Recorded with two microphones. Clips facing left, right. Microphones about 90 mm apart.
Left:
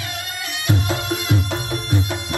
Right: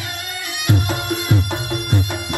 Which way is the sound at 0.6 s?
20° right (ahead or behind).